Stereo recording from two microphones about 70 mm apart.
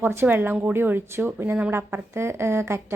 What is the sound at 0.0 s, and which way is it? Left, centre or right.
A woman's voice, right.